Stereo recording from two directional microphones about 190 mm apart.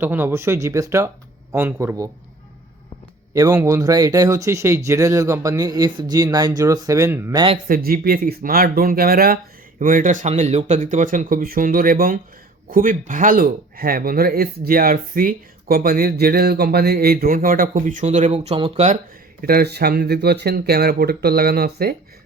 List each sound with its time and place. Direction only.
0.0 s speech: 10° right (ahead or behind)
3.3 s speech: 20° right (ahead or behind)
7.7 s speech: 50° right (ahead or behind); by 18.9 s 30° right (ahead or behind)
19.4 s speech: 50° right (ahead or behind)